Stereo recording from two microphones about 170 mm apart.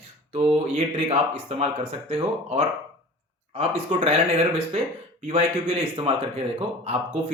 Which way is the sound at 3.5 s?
35° right (ahead or behind).